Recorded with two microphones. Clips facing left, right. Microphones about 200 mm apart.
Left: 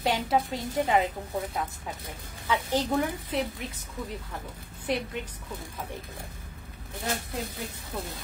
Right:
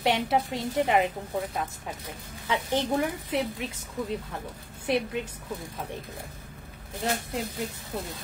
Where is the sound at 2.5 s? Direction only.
20° right (ahead or behind).